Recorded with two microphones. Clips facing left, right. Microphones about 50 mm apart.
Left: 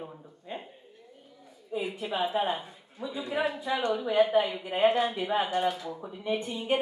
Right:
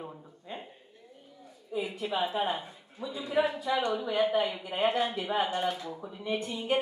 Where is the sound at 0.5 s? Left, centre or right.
Centre.